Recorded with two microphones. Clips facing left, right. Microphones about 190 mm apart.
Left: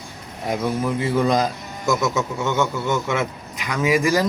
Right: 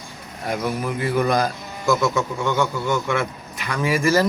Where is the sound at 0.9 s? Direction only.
20° left (ahead or behind).